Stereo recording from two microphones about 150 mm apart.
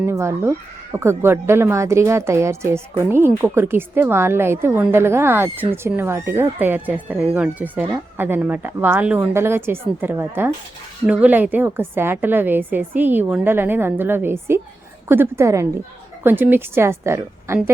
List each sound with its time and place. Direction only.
0.0 s a woman's voice: 20° right (ahead or behind)